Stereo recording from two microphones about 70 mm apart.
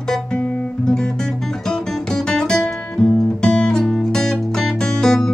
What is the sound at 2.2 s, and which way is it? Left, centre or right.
Music, centre.